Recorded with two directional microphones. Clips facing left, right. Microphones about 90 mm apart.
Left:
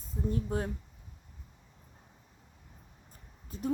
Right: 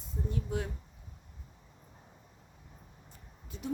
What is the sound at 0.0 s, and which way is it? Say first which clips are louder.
Speech: left 4 dB; 40° left (ahead or behind).